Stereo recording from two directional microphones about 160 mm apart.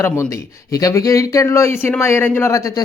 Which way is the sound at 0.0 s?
20° left (ahead or behind).